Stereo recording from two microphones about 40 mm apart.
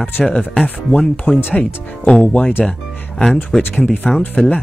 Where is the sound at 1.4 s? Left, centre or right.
Left.